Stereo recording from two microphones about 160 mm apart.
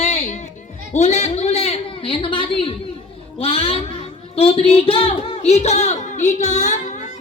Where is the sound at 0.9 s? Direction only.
45° left (ahead or behind).